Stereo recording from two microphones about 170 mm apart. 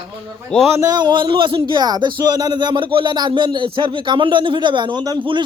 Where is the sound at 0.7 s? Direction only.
20° right (ahead or behind).